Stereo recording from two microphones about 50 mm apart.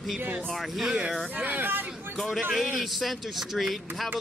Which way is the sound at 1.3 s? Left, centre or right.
Right.